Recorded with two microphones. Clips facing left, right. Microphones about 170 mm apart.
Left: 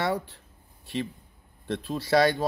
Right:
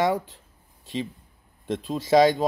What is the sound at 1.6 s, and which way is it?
Speech, 20° right (ahead or behind).